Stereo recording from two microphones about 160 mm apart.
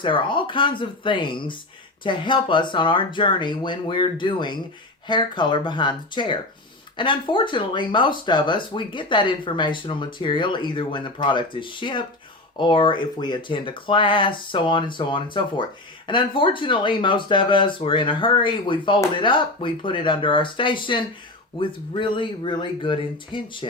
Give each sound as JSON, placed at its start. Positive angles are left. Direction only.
{"t": 0.0, "sound": "speech", "side_deg": 30}